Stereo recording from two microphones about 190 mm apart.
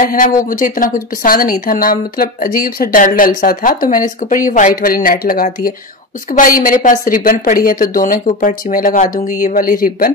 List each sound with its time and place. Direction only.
0.0 s a woman's voice: 45° left (ahead or behind)